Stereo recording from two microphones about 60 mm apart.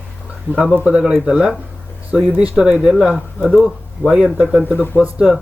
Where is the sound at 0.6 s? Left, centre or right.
Right.